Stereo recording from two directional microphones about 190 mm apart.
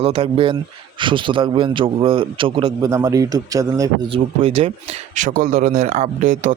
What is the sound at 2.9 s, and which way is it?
A man's voice, 15° right (ahead or behind).